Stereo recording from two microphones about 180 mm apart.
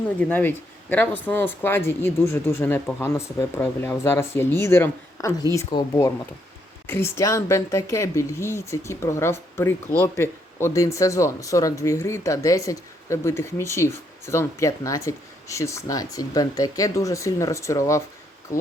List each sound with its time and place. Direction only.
0.2 s speech: 10° left (ahead or behind)